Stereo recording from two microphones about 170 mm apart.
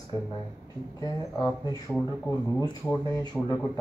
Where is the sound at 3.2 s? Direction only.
25° left (ahead or behind).